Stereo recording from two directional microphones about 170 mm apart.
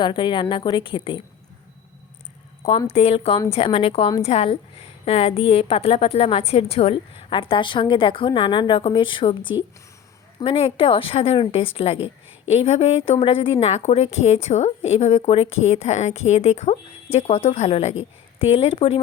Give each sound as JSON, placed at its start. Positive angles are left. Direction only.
{"t": 0.0, "sound": "a woman's voice", "side_deg": 30}
{"t": 2.9, "sound": "a woman's voice", "side_deg": 35}